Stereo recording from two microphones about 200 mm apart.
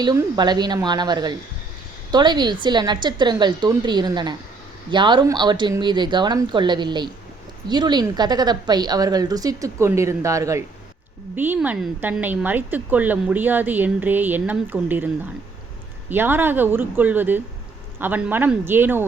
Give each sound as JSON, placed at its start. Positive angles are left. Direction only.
{"t": 0.0, "sound": "a woman's voice", "side_deg": -20}